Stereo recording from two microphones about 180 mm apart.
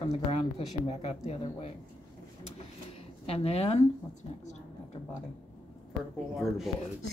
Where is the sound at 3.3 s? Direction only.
35° left (ahead or behind).